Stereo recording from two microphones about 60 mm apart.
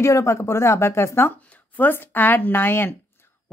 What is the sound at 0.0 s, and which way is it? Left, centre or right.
A woman's voice, left.